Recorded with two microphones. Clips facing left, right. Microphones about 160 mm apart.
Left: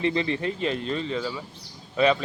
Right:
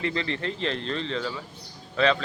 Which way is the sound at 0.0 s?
20° left (ahead or behind).